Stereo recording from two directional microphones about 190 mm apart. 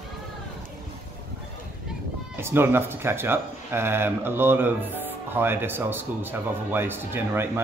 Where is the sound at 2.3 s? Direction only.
10° right (ahead or behind).